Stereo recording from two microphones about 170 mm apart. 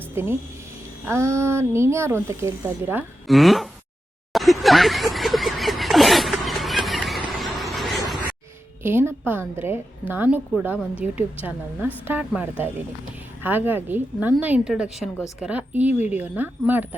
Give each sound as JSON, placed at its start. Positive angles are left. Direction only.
{"t": 0.1, "sound": "speech", "side_deg": -15}
{"t": 3.2, "sound": "speech", "side_deg": 0}
{"t": 4.3, "sound": "vehicle", "side_deg": 0}
{"t": 8.8, "sound": "speech", "side_deg": -15}